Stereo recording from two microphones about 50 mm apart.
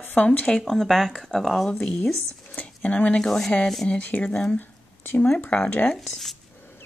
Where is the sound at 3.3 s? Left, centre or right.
Centre.